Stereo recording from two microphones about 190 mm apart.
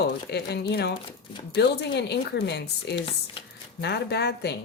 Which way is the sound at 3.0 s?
30° left (ahead or behind).